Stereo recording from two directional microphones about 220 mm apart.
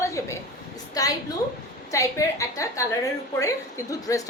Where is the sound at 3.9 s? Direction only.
15° left (ahead or behind).